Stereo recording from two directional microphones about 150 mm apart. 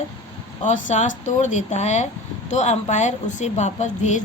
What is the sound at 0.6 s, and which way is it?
A woman's voice, 55° left (ahead or behind).